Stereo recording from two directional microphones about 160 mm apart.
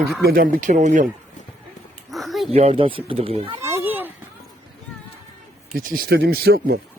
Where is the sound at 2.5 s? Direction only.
40° right (ahead or behind).